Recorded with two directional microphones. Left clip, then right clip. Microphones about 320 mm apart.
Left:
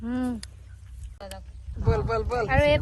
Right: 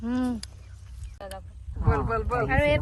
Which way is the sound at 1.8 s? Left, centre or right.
Centre.